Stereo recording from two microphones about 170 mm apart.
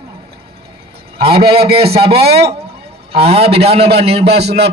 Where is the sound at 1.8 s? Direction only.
35° right (ahead or behind).